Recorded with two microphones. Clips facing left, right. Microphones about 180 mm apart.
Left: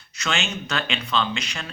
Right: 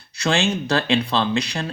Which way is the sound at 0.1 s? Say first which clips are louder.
Right 7 dB; 35° right (ahead or behind).